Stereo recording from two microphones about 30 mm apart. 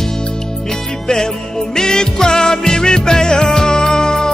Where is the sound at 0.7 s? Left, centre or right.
Left.